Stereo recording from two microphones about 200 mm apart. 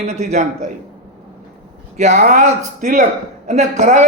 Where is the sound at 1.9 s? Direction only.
35° right (ahead or behind).